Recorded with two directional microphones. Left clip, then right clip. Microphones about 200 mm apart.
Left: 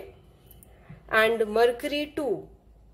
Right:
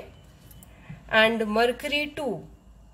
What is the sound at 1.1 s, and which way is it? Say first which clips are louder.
A woman's voice: right 1 dB; 20° left (ahead or behind).